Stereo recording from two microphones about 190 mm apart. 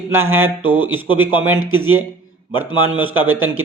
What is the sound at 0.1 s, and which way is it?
Speech, 90° right.